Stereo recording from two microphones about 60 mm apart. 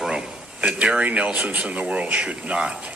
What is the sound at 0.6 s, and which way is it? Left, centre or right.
A man's voice, centre.